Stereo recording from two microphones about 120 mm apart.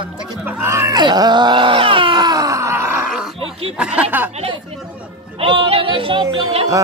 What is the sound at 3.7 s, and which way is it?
Speech, 10° right (ahead or behind).